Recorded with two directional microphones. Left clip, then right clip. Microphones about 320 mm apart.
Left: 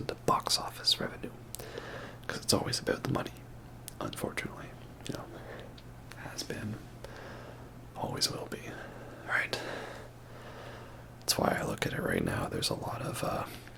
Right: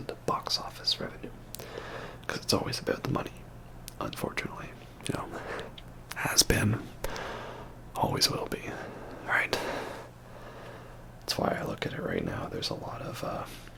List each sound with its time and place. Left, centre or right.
0.0 s whispering: centre
1.6 s a sound: centre
3.9 s whispering: centre; by 5.6 s right
6.1 s whispering: right
7.1 s a sound: right
7.9 s whispering: right
11.3 s speech: centre